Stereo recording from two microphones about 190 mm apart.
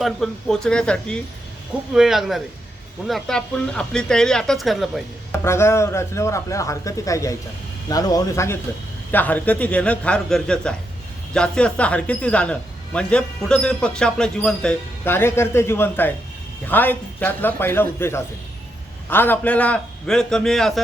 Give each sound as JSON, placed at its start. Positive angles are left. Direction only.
{"t": 0.0, "sound": "speech", "side_deg": 5}
{"t": 5.3, "sound": "speech", "side_deg": 15}